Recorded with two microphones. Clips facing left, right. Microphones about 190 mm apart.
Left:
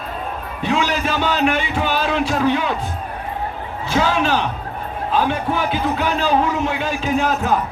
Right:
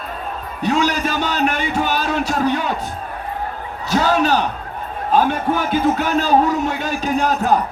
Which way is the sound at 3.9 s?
40° right (ahead or behind).